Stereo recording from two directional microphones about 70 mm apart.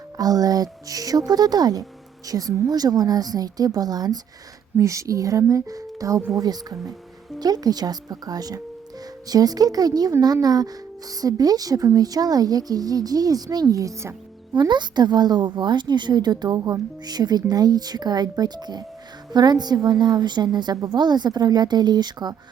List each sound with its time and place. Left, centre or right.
0.2 s speech: right
2.2 s speech: right
4.8 s speech: right
6.3 s speech: right
14.5 s a woman's voice: right